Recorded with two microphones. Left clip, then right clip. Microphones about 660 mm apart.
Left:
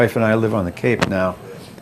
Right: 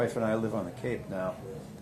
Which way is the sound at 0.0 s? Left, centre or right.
Left.